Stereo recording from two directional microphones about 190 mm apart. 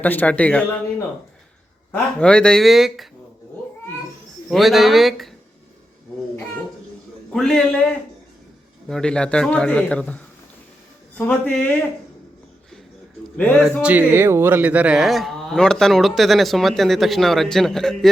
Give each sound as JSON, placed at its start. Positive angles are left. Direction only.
{"t": 0.0, "sound": "speech", "side_deg": 10}
{"t": 1.9, "sound": "speech", "side_deg": 5}
{"t": 4.4, "sound": "speech", "side_deg": 0}
{"t": 7.3, "sound": "speech", "side_deg": 5}
{"t": 8.9, "sound": "speech", "side_deg": 5}
{"t": 13.3, "sound": "speech", "side_deg": 5}
{"t": 13.8, "sound": "speech", "side_deg": -10}